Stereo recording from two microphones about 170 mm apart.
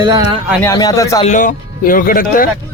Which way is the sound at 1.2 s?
50° left (ahead or behind).